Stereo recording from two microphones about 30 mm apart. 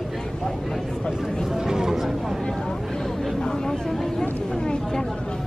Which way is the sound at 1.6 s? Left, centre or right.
Centre.